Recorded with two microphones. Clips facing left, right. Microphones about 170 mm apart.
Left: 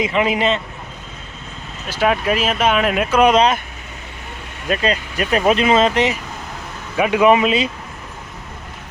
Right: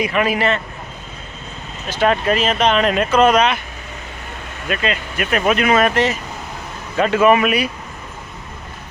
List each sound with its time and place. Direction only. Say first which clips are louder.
0.0 s speech: even; 20° left (ahead or behind)
1.9 s speech: right 1 dB; 5° left (ahead or behind)
4.7 s speech: left 2 dB; 35° left (ahead or behind)